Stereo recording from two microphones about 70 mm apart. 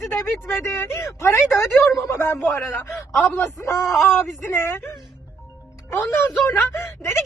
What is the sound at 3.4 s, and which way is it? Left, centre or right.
Speech, left.